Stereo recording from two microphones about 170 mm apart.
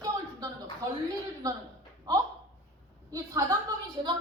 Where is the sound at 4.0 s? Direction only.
30° right (ahead or behind).